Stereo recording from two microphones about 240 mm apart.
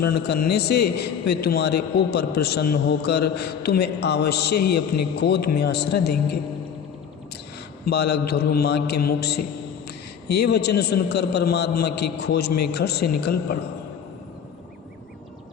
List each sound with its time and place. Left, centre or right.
0.0 s a man's voice: left
7.9 s a man's voice: left